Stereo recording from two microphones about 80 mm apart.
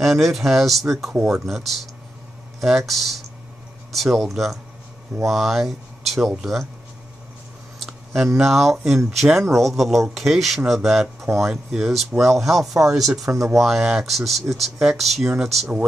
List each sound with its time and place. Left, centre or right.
0.0 s speech: centre
1.1 s speech: centre
1.4 s speech: centre
2.9 s speech: centre
7.8 s camera: centre
8.4 s speech: centre
13.2 s speech: right
13.6 s speech: centre